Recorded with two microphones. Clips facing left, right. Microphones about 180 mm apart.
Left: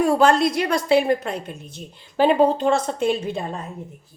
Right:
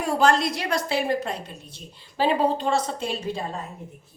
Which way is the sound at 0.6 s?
60° left (ahead or behind).